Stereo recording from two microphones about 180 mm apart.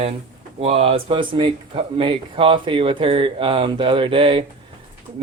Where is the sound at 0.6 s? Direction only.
35° right (ahead or behind).